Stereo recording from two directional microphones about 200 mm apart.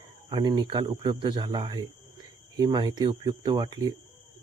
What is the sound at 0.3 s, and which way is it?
Speech, 25° right (ahead or behind).